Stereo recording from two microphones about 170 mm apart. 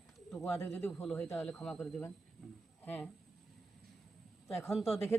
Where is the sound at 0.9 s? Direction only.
5° left (ahead or behind).